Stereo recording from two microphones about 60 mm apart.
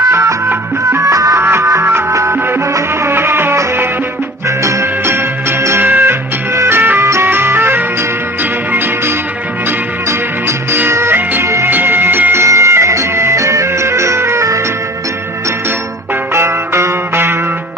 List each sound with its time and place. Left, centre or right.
0.0 s music: right
1.0 s music: right
1.4 s music: right
4.4 s music: right
5.8 s music: right
9.6 s music: right
11.7 s music: right
12.4 s music: right
16.3 s music: right